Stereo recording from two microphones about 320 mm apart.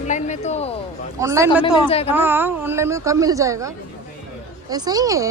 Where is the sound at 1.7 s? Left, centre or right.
Centre.